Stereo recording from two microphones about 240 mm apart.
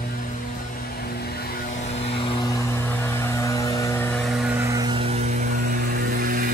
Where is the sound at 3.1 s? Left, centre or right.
Centre.